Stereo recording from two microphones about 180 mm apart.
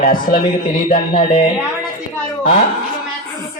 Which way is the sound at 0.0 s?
50° left (ahead or behind).